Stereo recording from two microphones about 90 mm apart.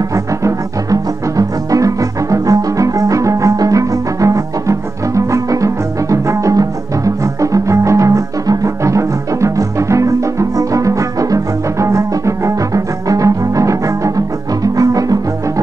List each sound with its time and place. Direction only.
0.1 s music: 35° right (ahead or behind)